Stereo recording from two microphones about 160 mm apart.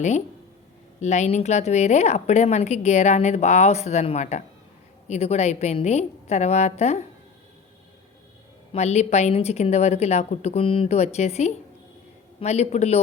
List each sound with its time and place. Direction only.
1.0 s speech: 45° left (ahead or behind)
8.7 s speech: 45° left (ahead or behind)